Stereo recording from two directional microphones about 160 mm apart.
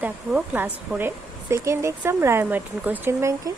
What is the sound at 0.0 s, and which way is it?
Speech, 10° right (ahead or behind).